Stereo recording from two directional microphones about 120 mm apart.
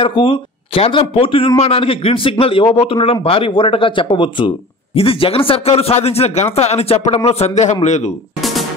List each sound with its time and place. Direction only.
0.0 s a man's voice: 50° left (ahead or behind); by 8.1 s 75° left (ahead or behind)
8.4 s music: centre (ahead or behind)